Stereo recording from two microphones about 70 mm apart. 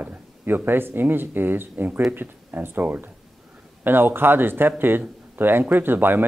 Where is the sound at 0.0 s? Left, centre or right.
Right.